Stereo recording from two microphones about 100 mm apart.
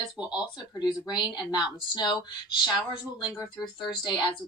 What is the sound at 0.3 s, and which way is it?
Speech, 45° left (ahead or behind).